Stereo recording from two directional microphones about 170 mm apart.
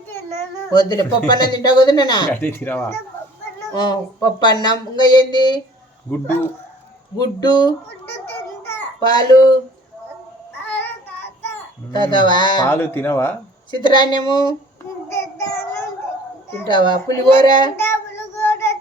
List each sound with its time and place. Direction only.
0.7 s speech: 25° left (ahead or behind)
2.3 s speech: 10° left (ahead or behind)
3.7 s speech: 25° left (ahead or behind)
6.1 s speech: 10° left (ahead or behind)
7.2 s speech: 25° left (ahead or behind)
8.3 s a sound: 10° left (ahead or behind)
9.0 s speech: 25° left (ahead or behind)
10.7 s child singing: 10° left (ahead or behind)
11.4 s a child's voice: 25° left (ahead or behind)
12.7 s speech: 10° left (ahead or behind)
13.7 s speech: 25° left (ahead or behind)
15.1 s child singing: 15° left (ahead or behind)
16.6 s speech: 25° left (ahead or behind)
17.7 s child singing: 15° left (ahead or behind)